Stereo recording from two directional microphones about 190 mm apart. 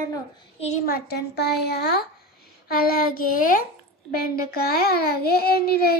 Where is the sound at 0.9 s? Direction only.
60° left (ahead or behind).